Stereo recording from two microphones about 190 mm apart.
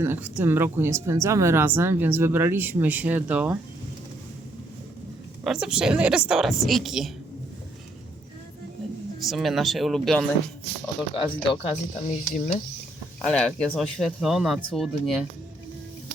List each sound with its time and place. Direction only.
0.0 s a woman's voice: 10° right (ahead or behind)
5.4 s speech: 5° right (ahead or behind)
9.2 s speech: centre (ahead or behind)
11.4 s speech: 35° left (ahead or behind)
13.2 s speech: 5° left (ahead or behind)